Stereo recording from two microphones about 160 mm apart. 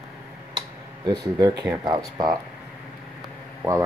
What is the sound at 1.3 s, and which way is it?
Speech, 25° right (ahead or behind).